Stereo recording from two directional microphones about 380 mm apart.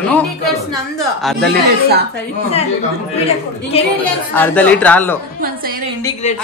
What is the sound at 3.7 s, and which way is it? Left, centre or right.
Speech, centre.